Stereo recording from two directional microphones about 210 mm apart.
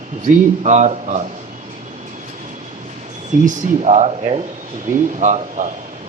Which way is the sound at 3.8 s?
30° right (ahead or behind).